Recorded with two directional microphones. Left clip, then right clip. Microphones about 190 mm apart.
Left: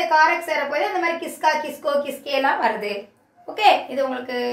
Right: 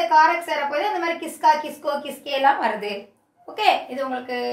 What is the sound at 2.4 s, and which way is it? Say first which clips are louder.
Speech: right 2 dB; 25° right (ahead or behind).